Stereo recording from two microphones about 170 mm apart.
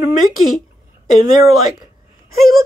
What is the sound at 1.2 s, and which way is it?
Speech, 25° right (ahead or behind).